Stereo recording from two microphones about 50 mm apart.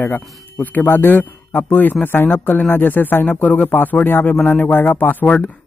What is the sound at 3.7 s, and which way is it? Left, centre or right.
A man's voice, left.